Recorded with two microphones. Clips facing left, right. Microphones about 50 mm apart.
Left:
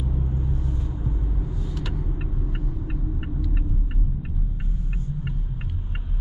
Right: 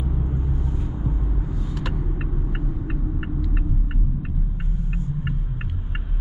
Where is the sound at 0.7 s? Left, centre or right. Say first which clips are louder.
Right 2 dB; centre.